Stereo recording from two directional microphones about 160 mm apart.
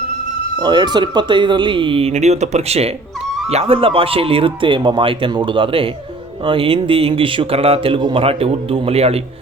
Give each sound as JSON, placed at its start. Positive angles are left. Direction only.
{"t": 0.6, "sound": "a man's voice", "side_deg": -30}